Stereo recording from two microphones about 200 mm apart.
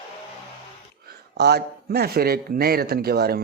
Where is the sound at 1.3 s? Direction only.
55° right (ahead or behind).